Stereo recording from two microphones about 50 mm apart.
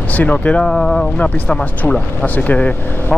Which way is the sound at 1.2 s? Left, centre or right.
Left.